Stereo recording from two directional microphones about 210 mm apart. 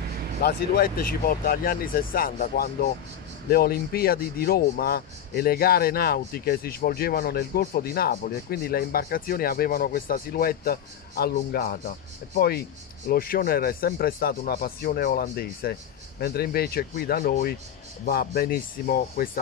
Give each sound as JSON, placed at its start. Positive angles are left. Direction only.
{"t": 0.4, "sound": "speech", "side_deg": 45}